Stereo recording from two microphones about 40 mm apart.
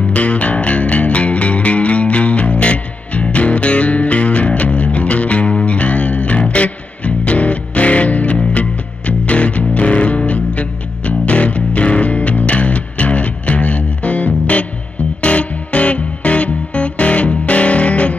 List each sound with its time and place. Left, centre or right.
0.1 s music: left